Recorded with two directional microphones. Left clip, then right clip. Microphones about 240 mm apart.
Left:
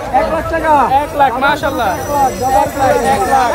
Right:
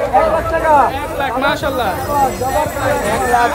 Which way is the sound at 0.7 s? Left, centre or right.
Left.